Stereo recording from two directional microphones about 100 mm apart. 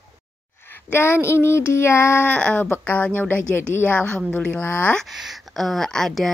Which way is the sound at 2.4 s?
10° left (ahead or behind).